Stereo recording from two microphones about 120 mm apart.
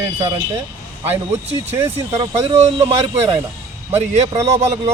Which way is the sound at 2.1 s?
25° right (ahead or behind).